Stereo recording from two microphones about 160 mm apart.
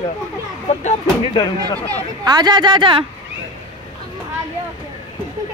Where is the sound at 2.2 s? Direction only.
25° right (ahead or behind).